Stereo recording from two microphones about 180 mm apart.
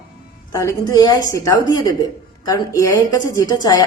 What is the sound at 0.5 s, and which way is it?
A woman's voice, 20° left (ahead or behind).